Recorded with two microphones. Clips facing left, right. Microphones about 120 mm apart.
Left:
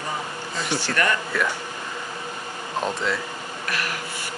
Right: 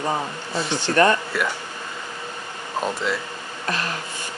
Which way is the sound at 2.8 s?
5° right (ahead or behind).